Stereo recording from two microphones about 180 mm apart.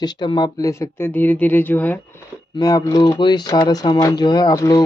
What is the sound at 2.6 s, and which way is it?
Speech, 20° left (ahead or behind).